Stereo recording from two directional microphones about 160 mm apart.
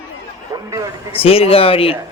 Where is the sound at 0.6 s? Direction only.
20° right (ahead or behind).